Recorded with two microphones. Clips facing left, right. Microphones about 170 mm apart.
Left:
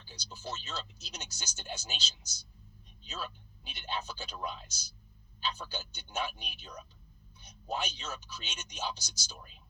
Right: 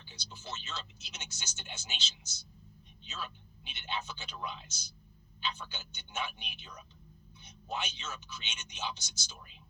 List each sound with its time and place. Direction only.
0.0 s speech: 40° left (ahead or behind)